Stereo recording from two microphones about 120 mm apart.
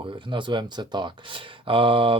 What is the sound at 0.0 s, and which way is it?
Speech, 45° right (ahead or behind).